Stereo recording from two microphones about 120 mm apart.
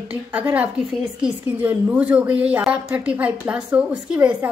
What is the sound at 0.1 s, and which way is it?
A woman's voice, 10° right (ahead or behind).